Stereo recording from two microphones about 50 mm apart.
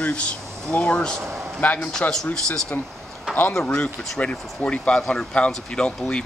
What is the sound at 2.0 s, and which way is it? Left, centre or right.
Speech, centre.